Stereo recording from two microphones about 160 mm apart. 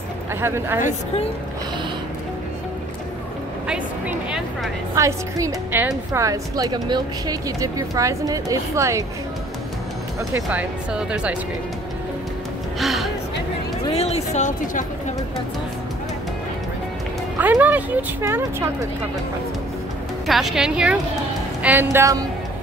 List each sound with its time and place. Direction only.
0.4 s speech: 15° right (ahead or behind)
4.9 s a woman's voice: 20° right (ahead or behind)
10.3 s speech: 10° right (ahead or behind)
12.7 s music: centre (ahead or behind)
13.8 s speech: 40° left (ahead or behind)
17.4 s speech: 10° right (ahead or behind)
20.2 s a woman's voice: centre (ahead or behind)
21.9 s a woman's voice: 20° right (ahead or behind)